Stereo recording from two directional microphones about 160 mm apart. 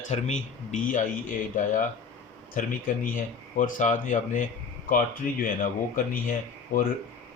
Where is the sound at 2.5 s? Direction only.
55° left (ahead or behind).